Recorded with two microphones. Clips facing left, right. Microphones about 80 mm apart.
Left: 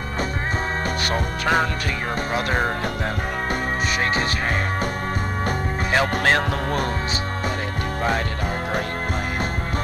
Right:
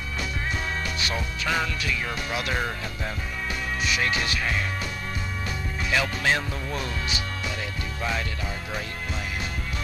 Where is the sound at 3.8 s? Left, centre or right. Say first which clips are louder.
Left 2 dB; left.